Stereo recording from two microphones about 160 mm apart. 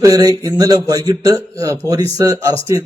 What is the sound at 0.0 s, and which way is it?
A man's voice, 25° right (ahead or behind).